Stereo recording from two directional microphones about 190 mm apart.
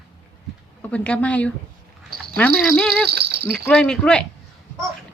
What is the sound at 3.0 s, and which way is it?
Cricket, 60° right (ahead or behind).